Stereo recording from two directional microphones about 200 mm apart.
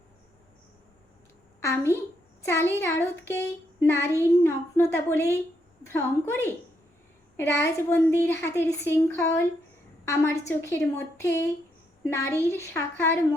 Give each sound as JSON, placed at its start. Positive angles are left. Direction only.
{"t": 1.6, "sound": "a woman's voice", "side_deg": 10}